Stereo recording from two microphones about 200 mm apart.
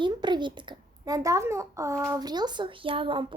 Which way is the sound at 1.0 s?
15° right (ahead or behind).